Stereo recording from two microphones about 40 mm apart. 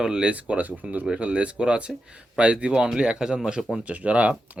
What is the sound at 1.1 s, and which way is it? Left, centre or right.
Speech, right.